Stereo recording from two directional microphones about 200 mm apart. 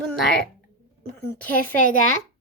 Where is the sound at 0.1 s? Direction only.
Centre (ahead or behind).